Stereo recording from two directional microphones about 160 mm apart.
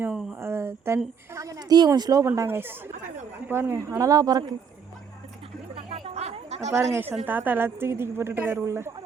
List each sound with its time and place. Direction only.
0.0 s a sound: 5° right (ahead or behind)
0.3 s a woman's voice: 15° right (ahead or behind)
5.7 s chatter: 35° right (ahead or behind)
6.9 s a woman's voice: 15° right (ahead or behind)